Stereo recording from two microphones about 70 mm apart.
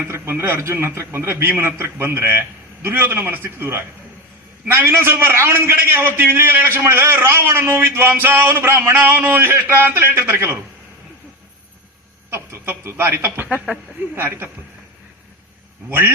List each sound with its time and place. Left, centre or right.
0.1 s a man's voice: right
12.3 s a man's voice: right
15.9 s a man's voice: right